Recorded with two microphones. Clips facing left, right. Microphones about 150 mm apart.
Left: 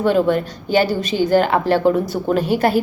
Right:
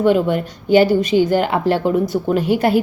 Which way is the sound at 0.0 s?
20° right (ahead or behind).